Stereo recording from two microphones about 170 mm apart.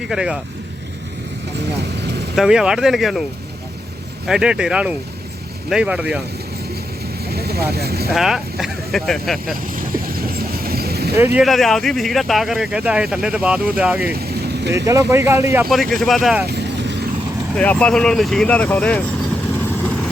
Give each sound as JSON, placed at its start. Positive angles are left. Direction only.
{"t": 0.1, "sound": "speech", "side_deg": -5}
{"t": 1.7, "sound": "vehicle", "side_deg": -80}
{"t": 2.3, "sound": "speech", "side_deg": -5}
{"t": 4.3, "sound": "speech", "side_deg": -5}
{"t": 7.3, "sound": "vehicle", "side_deg": -70}
{"t": 7.7, "sound": "speech", "side_deg": -70}
{"t": 8.1, "sound": "speech", "side_deg": 0}
{"t": 9.7, "sound": "vehicle", "side_deg": -60}
{"t": 11.3, "sound": "speech", "side_deg": 0}
{"t": 14.1, "sound": "vehicle", "side_deg": -65}
{"t": 14.8, "sound": "speech", "side_deg": -15}
{"t": 15.7, "sound": "speech", "side_deg": 0}
{"t": 16.5, "sound": "vehicle", "side_deg": -85}
{"t": 17.6, "sound": "speech", "side_deg": 5}